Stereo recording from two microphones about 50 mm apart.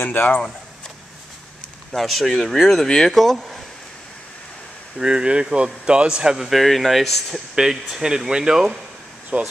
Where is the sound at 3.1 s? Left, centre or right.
Centre.